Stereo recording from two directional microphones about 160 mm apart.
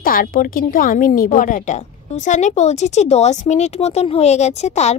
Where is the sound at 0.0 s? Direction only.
60° left (ahead or behind).